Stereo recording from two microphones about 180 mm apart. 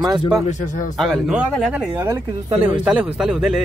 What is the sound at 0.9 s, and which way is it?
Speech, centre (ahead or behind).